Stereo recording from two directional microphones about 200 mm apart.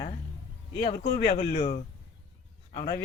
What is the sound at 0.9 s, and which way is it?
A man's voice, 35° left (ahead or behind).